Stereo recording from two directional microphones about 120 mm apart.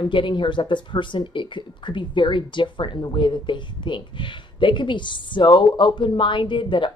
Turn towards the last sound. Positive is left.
turn(degrees=40)  # may be behind; listen again after turning